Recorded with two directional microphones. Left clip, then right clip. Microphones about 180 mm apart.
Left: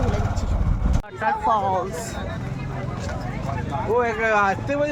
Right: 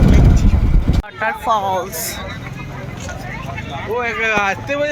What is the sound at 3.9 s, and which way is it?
Speech, 30° left (ahead or behind).